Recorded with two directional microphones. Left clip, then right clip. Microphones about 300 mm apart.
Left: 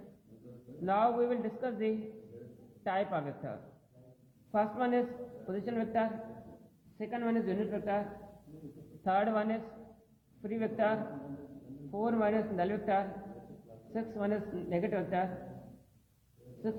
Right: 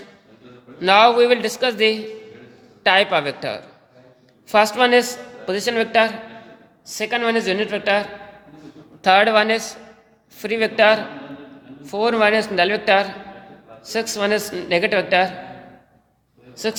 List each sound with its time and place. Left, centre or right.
0.9 s a woman's voice: right
9.0 s a woman's voice: right
12.0 s a woman's voice: right